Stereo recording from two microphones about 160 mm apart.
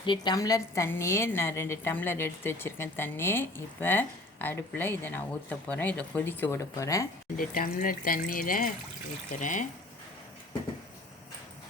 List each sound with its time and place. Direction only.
0.0 s a woman's voice: 30° left (ahead or behind)
7.3 s speech: 60° left (ahead or behind)